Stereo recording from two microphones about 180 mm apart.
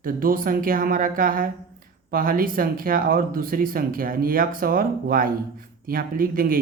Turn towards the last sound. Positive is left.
turn(degrees=-50)  # may be behind; listen again after turning